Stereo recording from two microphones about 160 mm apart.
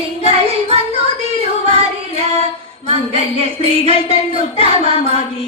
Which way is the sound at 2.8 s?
40° right (ahead or behind).